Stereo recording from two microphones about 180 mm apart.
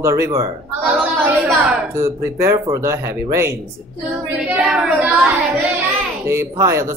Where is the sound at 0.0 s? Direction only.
15° right (ahead or behind).